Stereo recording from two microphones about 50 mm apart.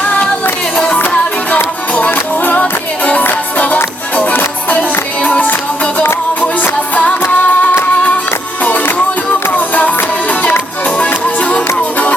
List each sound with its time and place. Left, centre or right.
0.9 s music: left
2.6 s music: left